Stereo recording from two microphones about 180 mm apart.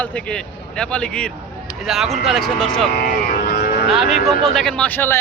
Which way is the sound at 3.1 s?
60° left (ahead or behind).